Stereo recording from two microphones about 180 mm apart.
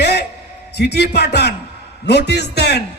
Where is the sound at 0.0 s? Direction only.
65° left (ahead or behind).